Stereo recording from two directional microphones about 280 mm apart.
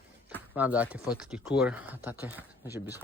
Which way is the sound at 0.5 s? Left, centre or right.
Centre.